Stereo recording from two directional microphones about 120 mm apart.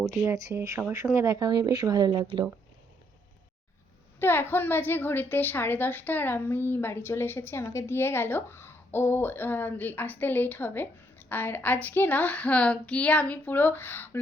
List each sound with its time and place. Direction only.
0.1 s speech: 25° right (ahead or behind)
0.8 s speech: 15° right (ahead or behind); by 2.2 s 35° right (ahead or behind)
4.2 s a woman's voice: 20° left (ahead or behind)